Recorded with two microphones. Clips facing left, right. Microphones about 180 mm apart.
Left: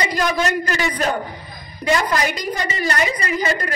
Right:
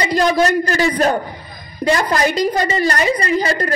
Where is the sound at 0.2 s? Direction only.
35° right (ahead or behind).